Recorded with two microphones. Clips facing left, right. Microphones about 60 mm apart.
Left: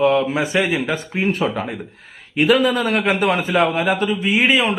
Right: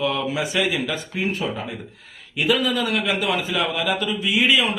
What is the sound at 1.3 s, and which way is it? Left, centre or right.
Speech, left.